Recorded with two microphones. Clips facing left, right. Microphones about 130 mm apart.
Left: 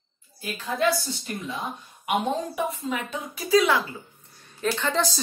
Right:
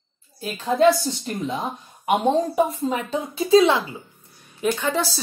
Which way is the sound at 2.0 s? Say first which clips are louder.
Right 6 dB; 35° right (ahead or behind).